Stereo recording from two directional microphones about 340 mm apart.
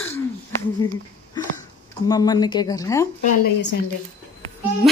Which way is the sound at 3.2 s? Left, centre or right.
Left.